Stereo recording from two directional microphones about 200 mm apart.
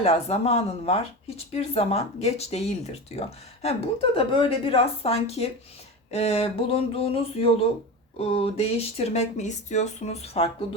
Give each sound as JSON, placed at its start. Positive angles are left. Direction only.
{"t": 0.0, "sound": "speech", "side_deg": 30}
{"t": 6.1, "sound": "a sound", "side_deg": 30}
{"t": 8.2, "sound": "speech", "side_deg": 30}